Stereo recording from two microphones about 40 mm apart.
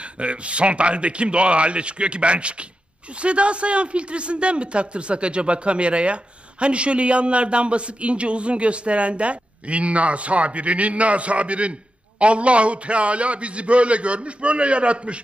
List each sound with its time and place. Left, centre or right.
0.0 s a man's voice: right